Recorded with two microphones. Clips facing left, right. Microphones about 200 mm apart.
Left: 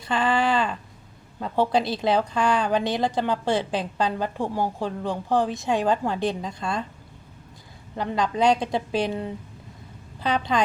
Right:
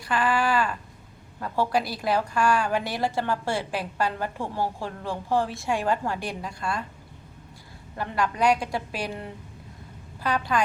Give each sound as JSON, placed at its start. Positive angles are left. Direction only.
{"t": 0.0, "sound": "a woman's voice", "side_deg": 25}
{"t": 7.9, "sound": "a woman's voice", "side_deg": 20}